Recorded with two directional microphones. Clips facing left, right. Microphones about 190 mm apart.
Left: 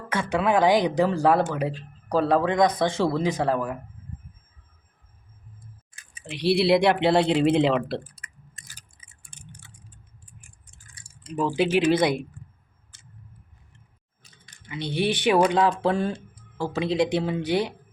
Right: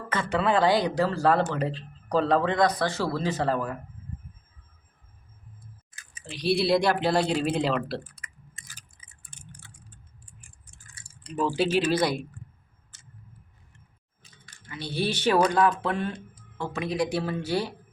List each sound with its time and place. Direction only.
0.1 s speech: 10° left (ahead or behind)
6.1 s speech: 25° left (ahead or behind)
11.1 s speech: 15° left (ahead or behind)
14.4 s speech: 20° left (ahead or behind)
15.5 s speech: 30° left (ahead or behind)